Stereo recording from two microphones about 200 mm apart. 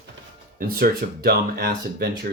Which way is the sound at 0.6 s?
45° right (ahead or behind).